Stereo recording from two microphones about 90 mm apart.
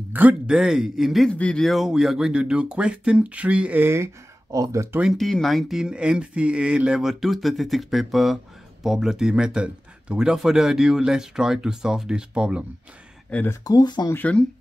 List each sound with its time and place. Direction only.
0.1 s speech: 20° right (ahead or behind)
1.3 s speech: 15° left (ahead or behind)
1.6 s speech: centre (ahead or behind)
3.8 s speech: 30° right (ahead or behind)
5.1 s speech: centre (ahead or behind)
13.3 s speech: 15° left (ahead or behind)
13.7 s speech: 50° left (ahead or behind)
14.1 s speech: 15° left (ahead or behind)